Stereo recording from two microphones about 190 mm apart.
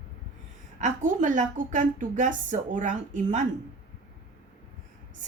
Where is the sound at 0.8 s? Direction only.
40° right (ahead or behind).